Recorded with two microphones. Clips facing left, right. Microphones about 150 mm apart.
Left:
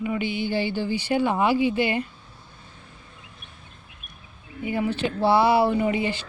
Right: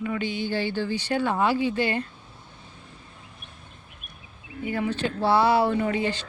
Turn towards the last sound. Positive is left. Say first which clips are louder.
# left 1 dB
turn(degrees=10)  # may be behind; listen again after turning